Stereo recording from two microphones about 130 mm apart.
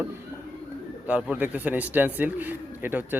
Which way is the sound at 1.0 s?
10° right (ahead or behind).